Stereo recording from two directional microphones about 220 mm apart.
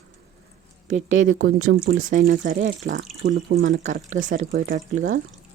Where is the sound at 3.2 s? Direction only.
55° right (ahead or behind).